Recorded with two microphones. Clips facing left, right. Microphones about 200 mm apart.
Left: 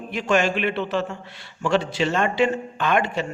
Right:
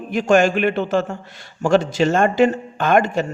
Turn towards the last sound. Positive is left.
turn(degrees=-45)  # may be behind; listen again after turning